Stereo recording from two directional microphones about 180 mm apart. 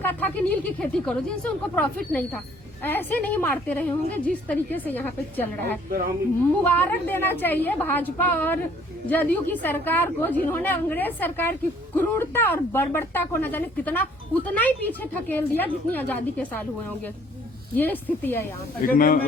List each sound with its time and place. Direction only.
0.0 s speech: 10° left (ahead or behind)
18.9 s speech: 50° left (ahead or behind)